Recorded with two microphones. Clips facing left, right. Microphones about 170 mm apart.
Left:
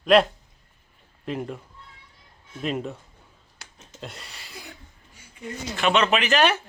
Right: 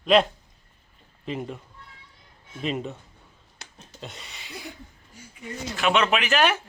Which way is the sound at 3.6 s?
20° right (ahead or behind).